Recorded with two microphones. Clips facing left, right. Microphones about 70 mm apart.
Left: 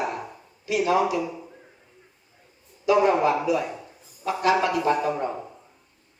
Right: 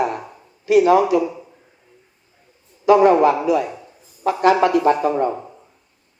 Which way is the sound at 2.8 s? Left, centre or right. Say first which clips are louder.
Right 7 dB; right.